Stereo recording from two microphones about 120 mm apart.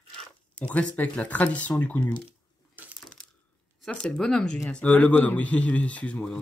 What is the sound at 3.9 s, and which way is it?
Speech, 5° left (ahead or behind).